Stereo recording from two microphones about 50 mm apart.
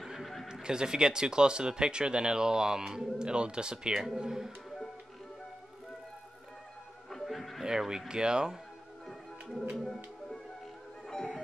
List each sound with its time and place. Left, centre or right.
0.0 s music: centre
0.5 s speech: centre
7.1 s a sound: centre
7.6 s speech: centre
11.1 s music: centre